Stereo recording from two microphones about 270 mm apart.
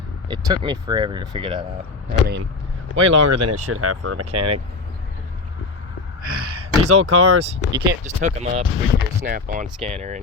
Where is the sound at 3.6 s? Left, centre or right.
Right.